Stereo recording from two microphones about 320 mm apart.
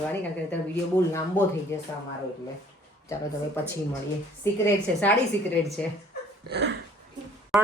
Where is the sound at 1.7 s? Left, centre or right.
Centre.